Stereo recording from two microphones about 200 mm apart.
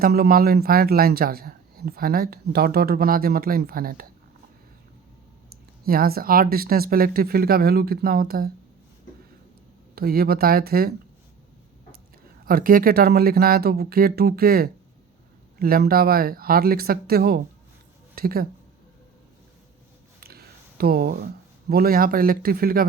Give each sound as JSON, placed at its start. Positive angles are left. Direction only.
{"t": 0.0, "sound": "speech", "side_deg": -50}
{"t": 5.8, "sound": "speech", "side_deg": -50}
{"t": 9.9, "sound": "speech", "side_deg": -50}
{"t": 12.5, "sound": "speech", "side_deg": -45}
{"t": 20.1, "sound": "a sound", "side_deg": -50}
{"t": 21.7, "sound": "speech", "side_deg": -50}